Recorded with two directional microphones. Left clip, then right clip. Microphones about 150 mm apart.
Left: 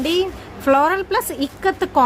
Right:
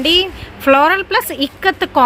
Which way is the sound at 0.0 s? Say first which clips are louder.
Right 6 dB; 15° right (ahead or behind).